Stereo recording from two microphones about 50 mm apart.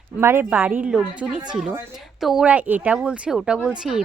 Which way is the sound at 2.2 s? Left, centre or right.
Centre.